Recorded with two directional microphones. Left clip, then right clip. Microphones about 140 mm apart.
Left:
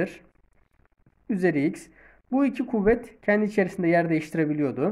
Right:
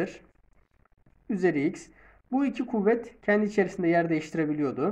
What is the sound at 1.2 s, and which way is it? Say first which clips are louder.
Speech: left 2 dB; 40° left (ahead or behind).